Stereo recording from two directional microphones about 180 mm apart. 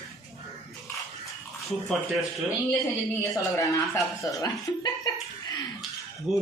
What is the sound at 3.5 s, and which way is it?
Speech, 15° left (ahead or behind).